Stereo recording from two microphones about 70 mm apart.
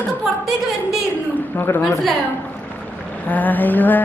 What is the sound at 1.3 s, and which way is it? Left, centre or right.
Speech, left.